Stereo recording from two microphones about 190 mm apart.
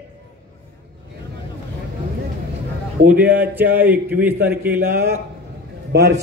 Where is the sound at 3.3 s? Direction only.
10° right (ahead or behind).